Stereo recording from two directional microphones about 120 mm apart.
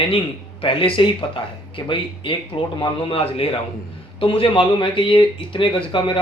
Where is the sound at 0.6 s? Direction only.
45° left (ahead or behind).